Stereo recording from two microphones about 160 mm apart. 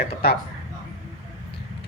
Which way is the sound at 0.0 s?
80° left.